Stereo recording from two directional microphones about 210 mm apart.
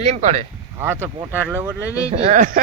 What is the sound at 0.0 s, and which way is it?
Speech, 35° right (ahead or behind).